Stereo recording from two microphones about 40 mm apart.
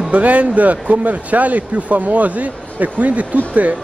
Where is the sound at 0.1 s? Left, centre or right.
Right.